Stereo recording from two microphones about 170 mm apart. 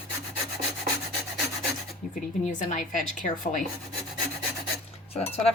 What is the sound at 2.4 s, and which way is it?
A woman's voice, 50° left (ahead or behind).